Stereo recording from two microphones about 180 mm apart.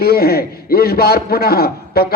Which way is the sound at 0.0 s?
60° left (ahead or behind).